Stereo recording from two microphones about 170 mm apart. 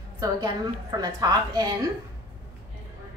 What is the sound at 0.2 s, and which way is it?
A woman's voice, 20° right (ahead or behind).